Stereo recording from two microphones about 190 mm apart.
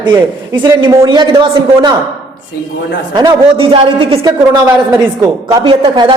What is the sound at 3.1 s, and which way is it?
A man's voice, 25° right (ahead or behind).